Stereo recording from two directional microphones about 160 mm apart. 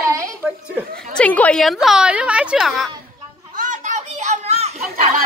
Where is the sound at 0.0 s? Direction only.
20° right (ahead or behind).